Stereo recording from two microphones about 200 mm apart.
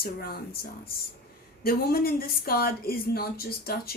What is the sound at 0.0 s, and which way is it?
Speech, 50° left (ahead or behind).